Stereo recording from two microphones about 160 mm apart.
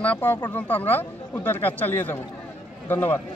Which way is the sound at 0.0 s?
10° left (ahead or behind).